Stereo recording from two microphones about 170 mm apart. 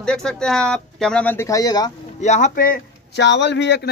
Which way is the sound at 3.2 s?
90° left.